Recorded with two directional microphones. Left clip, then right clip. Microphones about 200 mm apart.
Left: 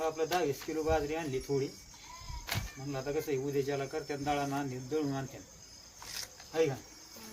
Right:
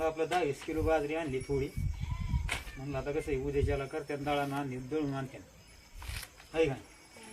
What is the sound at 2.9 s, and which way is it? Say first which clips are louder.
Speech: even; centre (ahead or behind).